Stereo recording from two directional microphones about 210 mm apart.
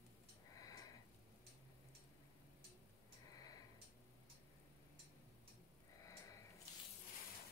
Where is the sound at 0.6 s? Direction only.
15° left (ahead or behind).